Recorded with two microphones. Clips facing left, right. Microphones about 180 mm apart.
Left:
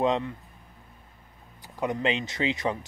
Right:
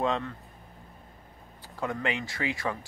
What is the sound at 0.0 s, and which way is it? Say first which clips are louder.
Speech: left 4 dB; 15° left (ahead or behind).